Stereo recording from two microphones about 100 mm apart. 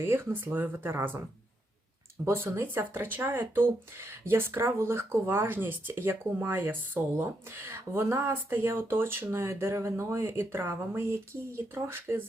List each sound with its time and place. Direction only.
0.0 s speech: 20° right (ahead or behind)
2.2 s speech: 25° right (ahead or behind)